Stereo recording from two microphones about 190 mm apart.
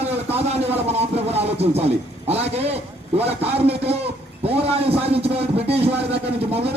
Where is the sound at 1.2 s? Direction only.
35° right (ahead or behind).